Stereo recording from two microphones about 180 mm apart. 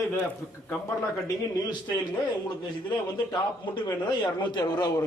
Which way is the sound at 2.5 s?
20° left (ahead or behind).